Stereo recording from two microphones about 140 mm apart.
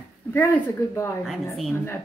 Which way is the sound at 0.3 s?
15° left (ahead or behind).